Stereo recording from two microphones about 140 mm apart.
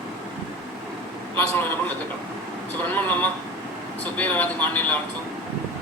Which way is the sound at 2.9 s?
10° left (ahead or behind).